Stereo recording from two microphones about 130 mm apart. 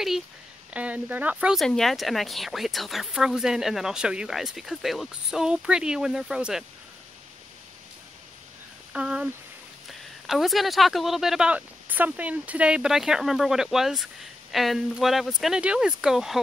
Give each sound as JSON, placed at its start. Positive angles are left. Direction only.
{"t": 0.7, "sound": "a woman's voice", "side_deg": -10}
{"t": 8.9, "sound": "a woman's voice", "side_deg": -5}